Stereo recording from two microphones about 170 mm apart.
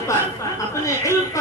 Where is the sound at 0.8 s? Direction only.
20° left (ahead or behind).